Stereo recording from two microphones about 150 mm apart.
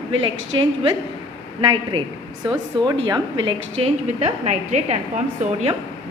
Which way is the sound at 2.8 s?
30° right (ahead or behind).